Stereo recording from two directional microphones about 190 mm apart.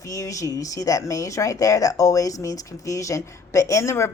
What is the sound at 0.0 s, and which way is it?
Speech, 15° left (ahead or behind).